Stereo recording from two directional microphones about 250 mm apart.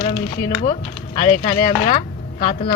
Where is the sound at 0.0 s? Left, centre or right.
Left.